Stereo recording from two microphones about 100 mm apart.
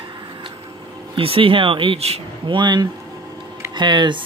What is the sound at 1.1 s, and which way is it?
Speech, 65° right (ahead or behind).